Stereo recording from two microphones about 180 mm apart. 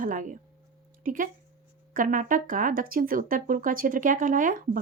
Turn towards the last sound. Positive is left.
turn(degrees=-50)  # may be behind; listen again after turning